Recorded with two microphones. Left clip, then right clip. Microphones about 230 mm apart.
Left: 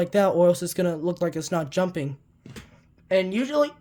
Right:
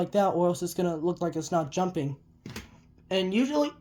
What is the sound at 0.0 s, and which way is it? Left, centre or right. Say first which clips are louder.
Speech: left 5 dB; left.